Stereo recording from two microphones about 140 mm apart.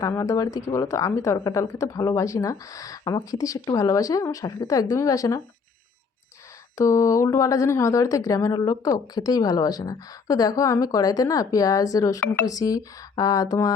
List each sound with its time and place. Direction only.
0.0 s speech: 25° left (ahead or behind)
6.7 s speech: 20° left (ahead or behind)